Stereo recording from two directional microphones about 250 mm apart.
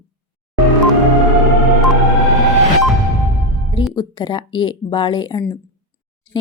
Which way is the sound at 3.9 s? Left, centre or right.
Centre.